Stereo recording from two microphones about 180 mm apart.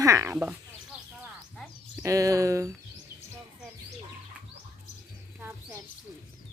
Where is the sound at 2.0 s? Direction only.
15° right (ahead or behind).